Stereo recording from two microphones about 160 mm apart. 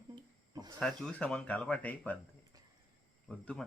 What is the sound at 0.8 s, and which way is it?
Speech, 5° left (ahead or behind).